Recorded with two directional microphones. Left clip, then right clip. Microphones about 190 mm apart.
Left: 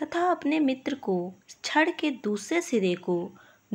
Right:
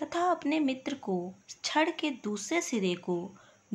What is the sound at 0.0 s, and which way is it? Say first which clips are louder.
Speech: left 3 dB; 15° left (ahead or behind).